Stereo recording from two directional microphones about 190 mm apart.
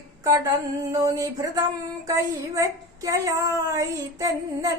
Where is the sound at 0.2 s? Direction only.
15° right (ahead or behind).